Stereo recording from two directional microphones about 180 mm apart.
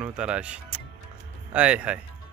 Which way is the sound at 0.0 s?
5° right (ahead or behind).